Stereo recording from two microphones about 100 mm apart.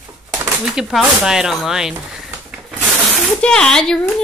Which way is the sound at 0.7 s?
5° right (ahead or behind).